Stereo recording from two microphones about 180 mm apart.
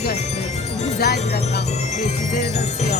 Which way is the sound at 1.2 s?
40° left (ahead or behind).